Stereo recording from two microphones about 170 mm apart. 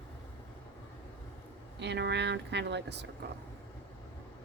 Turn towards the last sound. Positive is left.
turn(degrees=-85)